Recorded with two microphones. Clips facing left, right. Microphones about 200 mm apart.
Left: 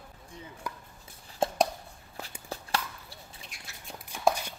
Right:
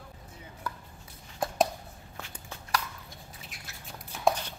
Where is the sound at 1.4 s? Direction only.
25° left (ahead or behind).